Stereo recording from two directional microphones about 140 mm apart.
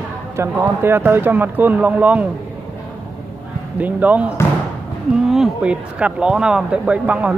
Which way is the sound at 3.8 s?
10° right (ahead or behind).